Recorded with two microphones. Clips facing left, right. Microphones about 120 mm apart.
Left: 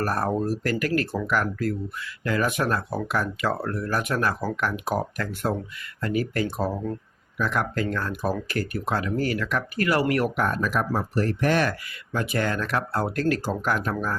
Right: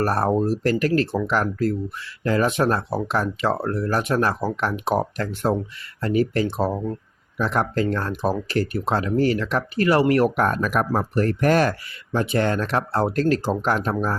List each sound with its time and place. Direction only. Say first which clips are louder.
0.0 s speech: right 4 dB; 30° right (ahead or behind)
10.4 s speech: right 3 dB; 55° right (ahead or behind)
12.1 s speech: right 5 dB; 30° right (ahead or behind)